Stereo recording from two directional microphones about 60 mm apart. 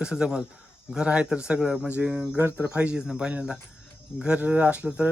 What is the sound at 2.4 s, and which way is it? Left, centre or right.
Speech, right.